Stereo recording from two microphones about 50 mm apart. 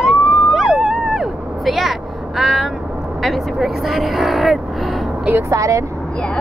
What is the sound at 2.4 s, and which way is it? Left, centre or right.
Speech, centre.